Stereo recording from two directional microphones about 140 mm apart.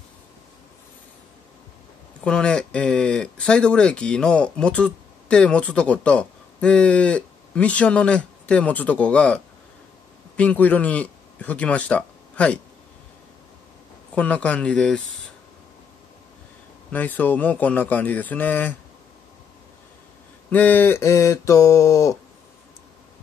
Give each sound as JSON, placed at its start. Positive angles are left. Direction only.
{"t": 2.2, "sound": "speech", "side_deg": 5}
{"t": 14.1, "sound": "speech", "side_deg": 10}
{"t": 16.9, "sound": "speech", "side_deg": 10}
{"t": 20.4, "sound": "mantra", "side_deg": 10}